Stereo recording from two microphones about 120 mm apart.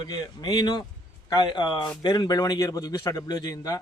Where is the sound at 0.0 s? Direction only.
35° left (ahead or behind).